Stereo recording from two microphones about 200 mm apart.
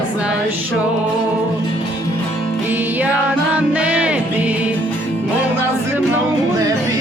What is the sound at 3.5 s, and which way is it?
Music, 5° right (ahead or behind).